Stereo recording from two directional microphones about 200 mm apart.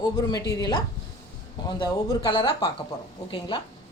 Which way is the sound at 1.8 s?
20° left (ahead or behind).